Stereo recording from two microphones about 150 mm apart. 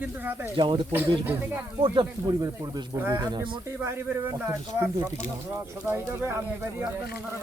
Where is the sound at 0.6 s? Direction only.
35° right (ahead or behind).